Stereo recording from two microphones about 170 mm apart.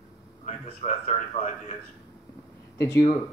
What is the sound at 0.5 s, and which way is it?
A man's voice, 40° left (ahead or behind).